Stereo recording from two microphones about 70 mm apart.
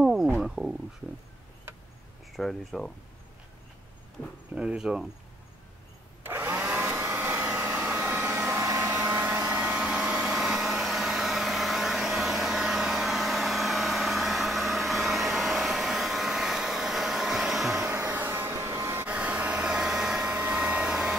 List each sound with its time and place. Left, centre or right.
0.0 s a sound: centre
0.4 s speech: centre
2.3 s speech: centre
4.6 s speech: centre
6.2 s vacuum cleaner: right
7.6 s a sound: right
8.1 s vehicle: right
8.6 s vacuum cleaner: right
9.4 s vacuum cleaner: right
10.3 s vehicle: centre
18.1 s vehicle: right
19.0 s hair dryer: centre
20.3 s hair dryer: centre